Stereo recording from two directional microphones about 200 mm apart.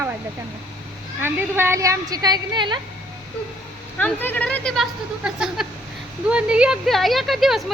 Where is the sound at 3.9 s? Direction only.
10° left (ahead or behind).